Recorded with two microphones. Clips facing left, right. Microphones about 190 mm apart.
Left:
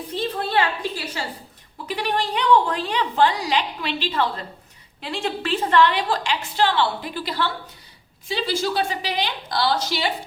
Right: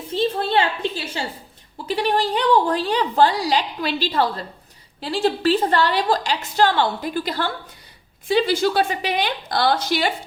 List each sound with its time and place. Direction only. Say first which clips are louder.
0.1 s a woman's voice: right 4 dB; 25° right (ahead or behind); by 10.1 s 55° right (ahead or behind)